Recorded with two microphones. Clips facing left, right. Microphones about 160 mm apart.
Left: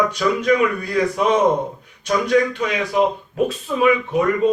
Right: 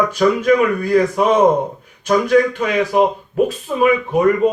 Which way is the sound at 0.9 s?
50° right (ahead or behind).